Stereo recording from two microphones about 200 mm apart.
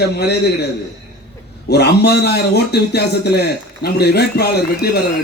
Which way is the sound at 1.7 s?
55° left (ahead or behind).